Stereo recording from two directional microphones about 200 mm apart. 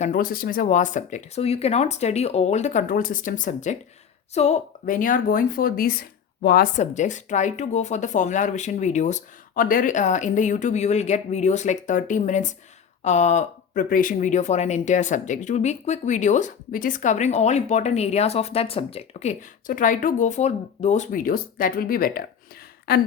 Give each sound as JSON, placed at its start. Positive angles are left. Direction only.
{"t": 0.0, "sound": "speech", "side_deg": 45}
{"t": 6.7, "sound": "speech", "side_deg": 40}